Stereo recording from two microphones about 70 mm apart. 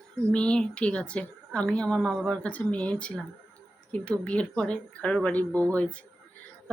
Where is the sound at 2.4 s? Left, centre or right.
Centre.